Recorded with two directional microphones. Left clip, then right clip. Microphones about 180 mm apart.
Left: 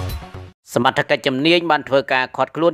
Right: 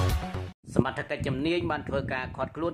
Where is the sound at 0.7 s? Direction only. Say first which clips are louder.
Left 13 dB; 50° left (ahead or behind).